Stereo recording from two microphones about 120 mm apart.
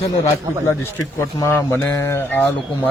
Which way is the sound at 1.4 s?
20° left (ahead or behind).